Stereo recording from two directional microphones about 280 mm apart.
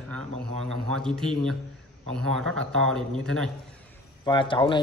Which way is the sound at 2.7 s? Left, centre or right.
Centre.